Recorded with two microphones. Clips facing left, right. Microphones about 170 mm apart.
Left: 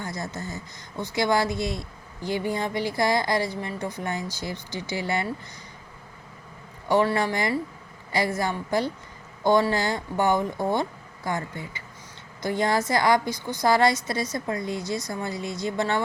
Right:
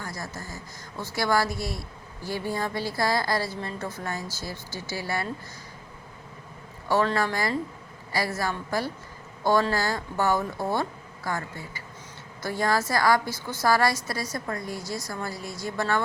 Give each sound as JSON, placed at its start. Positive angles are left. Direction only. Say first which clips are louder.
{"t": 0.0, "sound": "speech", "louder": "left 4 dB", "side_deg": 20}
{"t": 6.8, "sound": "a man's voice", "louder": "left 2 dB", "side_deg": 15}